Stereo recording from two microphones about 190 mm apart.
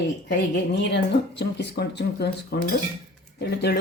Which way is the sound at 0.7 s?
65° left (ahead or behind).